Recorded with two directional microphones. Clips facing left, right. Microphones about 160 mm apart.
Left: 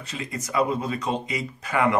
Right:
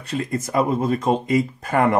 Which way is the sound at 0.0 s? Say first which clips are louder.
Right 8 dB; 55° right (ahead or behind).